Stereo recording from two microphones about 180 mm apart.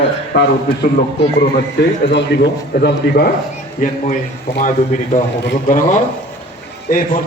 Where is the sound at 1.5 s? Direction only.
75° left (ahead or behind).